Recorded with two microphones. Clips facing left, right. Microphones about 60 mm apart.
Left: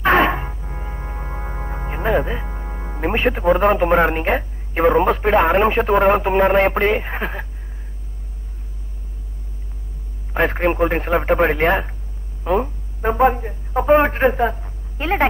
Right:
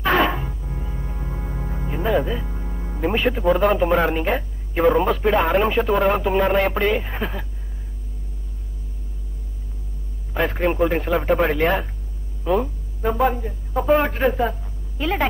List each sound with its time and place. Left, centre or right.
0.0 s music: left
10.3 s speech: left